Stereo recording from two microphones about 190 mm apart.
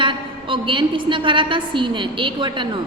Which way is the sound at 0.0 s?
25° right (ahead or behind).